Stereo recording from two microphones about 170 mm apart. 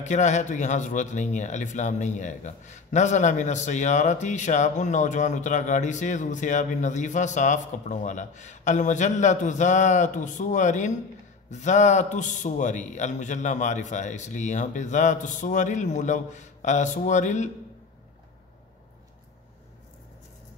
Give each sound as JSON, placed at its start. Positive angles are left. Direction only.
{"t": 0.0, "sound": "a man's voice", "side_deg": 45}